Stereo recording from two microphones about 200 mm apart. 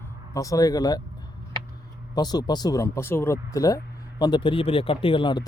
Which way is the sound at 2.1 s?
20° left (ahead or behind).